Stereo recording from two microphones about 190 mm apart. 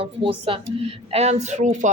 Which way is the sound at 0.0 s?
30° right (ahead or behind).